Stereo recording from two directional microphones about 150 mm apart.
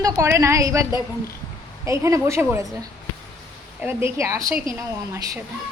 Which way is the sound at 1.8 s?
20° right (ahead or behind).